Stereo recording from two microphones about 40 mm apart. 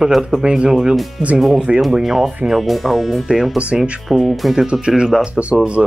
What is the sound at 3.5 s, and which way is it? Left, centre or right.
Speech, right.